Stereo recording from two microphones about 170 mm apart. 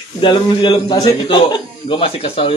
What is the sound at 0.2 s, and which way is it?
A man's voice, 25° left (ahead or behind).